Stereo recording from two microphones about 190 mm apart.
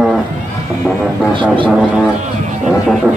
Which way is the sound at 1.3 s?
25° right (ahead or behind).